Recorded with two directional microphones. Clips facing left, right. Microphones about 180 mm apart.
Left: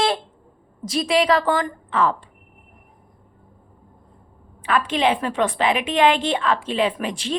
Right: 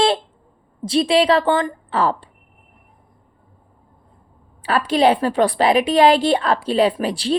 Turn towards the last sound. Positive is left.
turn(degrees=-35)  # may be behind; listen again after turning